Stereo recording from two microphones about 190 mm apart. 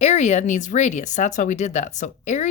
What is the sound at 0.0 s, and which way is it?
Speech, 35° left (ahead or behind).